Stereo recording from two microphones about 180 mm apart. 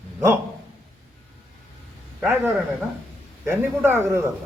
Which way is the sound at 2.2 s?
10° right (ahead or behind).